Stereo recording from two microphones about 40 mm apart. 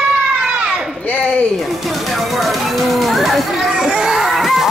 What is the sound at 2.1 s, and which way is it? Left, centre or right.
Speech, centre.